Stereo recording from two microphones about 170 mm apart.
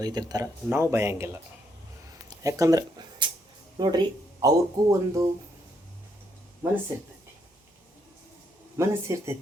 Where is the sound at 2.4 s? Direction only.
20° right (ahead or behind).